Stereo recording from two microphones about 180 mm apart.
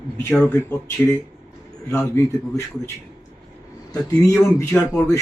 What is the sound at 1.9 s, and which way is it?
Speech, 15° left (ahead or behind).